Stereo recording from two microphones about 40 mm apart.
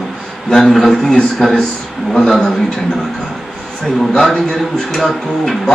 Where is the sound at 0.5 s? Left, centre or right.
Centre.